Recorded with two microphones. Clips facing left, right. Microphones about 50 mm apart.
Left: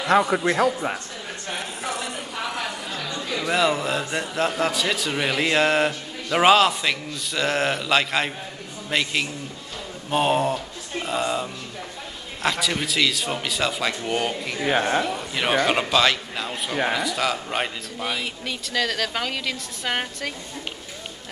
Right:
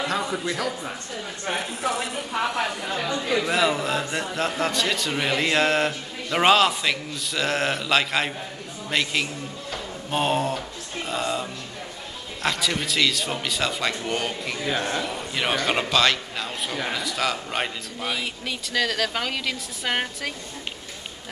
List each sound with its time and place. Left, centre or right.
0.1 s a man's voice: left
1.5 s a sound: centre
2.3 s a sound: centre
3.4 s a man's voice: centre
10.1 s mantra: centre
12.4 s a man's voice: centre
14.6 s speech: left
15.0 s a man's voice: centre